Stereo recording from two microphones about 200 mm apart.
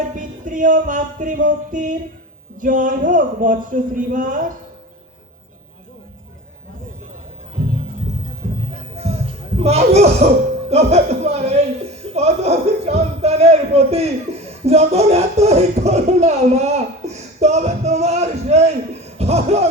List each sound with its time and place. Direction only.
0.2 s speech: 40° right (ahead or behind)
9.6 s speech: 30° right (ahead or behind)